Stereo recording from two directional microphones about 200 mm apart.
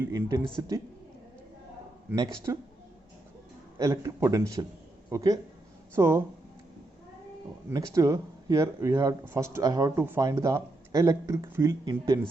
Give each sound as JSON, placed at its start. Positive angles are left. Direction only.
{"t": 0.0, "sound": "speech", "side_deg": -15}
{"t": 2.0, "sound": "speech", "side_deg": -15}
{"t": 3.8, "sound": "speech", "side_deg": -15}
{"t": 7.7, "sound": "speech", "side_deg": -15}